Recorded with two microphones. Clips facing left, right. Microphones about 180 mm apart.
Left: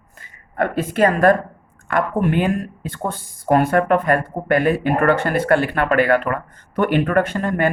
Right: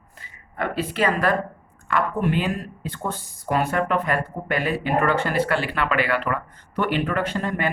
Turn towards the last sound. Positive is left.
turn(degrees=50)  # may be behind; listen again after turning